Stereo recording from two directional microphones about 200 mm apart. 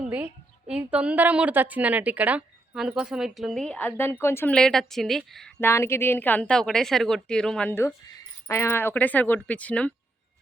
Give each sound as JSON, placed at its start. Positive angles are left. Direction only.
{"t": 0.7, "sound": "a woman's voice", "side_deg": -5}